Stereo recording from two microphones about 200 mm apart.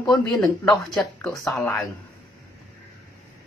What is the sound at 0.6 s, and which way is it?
Speech, centre (ahead or behind).